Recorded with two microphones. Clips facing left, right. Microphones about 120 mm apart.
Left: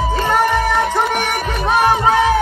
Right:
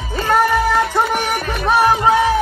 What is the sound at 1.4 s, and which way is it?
Music, 15° left (ahead or behind).